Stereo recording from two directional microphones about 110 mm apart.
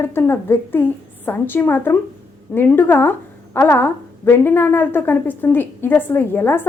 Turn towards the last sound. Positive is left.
turn(degrees=20)  # may be behind; listen again after turning